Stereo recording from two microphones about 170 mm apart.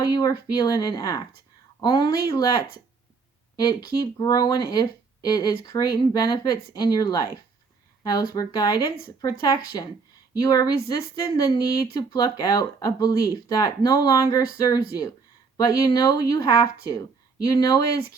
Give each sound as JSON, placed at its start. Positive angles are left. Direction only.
{"t": 0.0, "sound": "speech", "side_deg": 25}
{"t": 3.6, "sound": "speech", "side_deg": 20}